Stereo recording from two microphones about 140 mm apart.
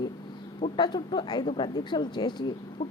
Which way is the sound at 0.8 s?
30° left (ahead or behind).